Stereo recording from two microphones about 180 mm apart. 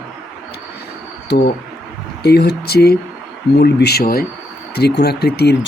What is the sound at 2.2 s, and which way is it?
Speech, 65° left (ahead or behind).